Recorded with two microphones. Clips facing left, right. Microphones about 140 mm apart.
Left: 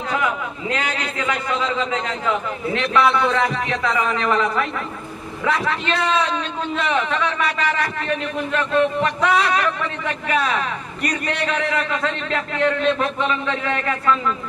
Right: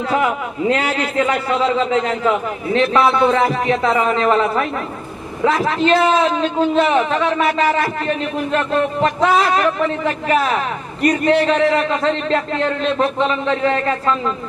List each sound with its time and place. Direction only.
0.1 s a man's voice: 35° right (ahead or behind)